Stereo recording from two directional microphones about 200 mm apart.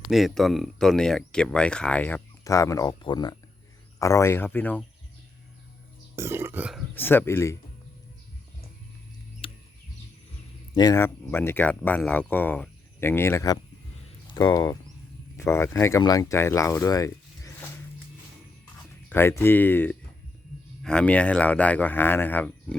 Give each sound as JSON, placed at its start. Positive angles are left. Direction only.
{"t": 0.1, "sound": "speech", "side_deg": 0}
{"t": 6.1, "sound": "speech", "side_deg": -10}
{"t": 6.9, "sound": "speech", "side_deg": 10}
{"t": 9.4, "sound": "a sound", "side_deg": 25}
{"t": 10.8, "sound": "speech", "side_deg": 15}
{"t": 19.0, "sound": "speech", "side_deg": 10}